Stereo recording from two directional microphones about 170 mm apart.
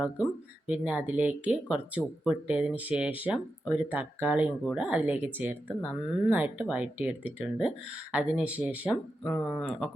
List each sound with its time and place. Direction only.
0.7 s speech: 10° right (ahead or behind)